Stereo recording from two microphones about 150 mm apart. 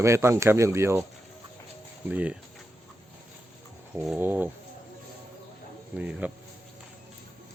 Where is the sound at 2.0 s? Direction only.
10° right (ahead or behind).